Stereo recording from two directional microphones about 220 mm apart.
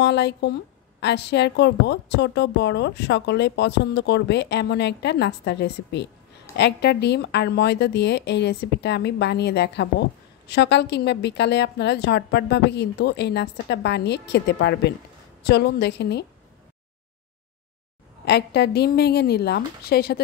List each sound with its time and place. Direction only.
0.0 s a woman's voice: 50° left (ahead or behind)
18.2 s a woman's voice: 50° left (ahead or behind)